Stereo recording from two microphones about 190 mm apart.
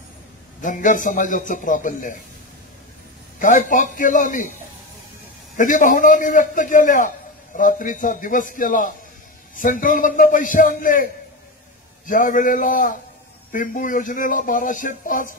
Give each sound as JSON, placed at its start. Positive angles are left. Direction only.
{"t": 0.6, "sound": "speech", "side_deg": 45}
{"t": 3.3, "sound": "speech", "side_deg": 45}
{"t": 5.6, "sound": "speech", "side_deg": 45}
{"t": 12.1, "sound": "speech", "side_deg": 45}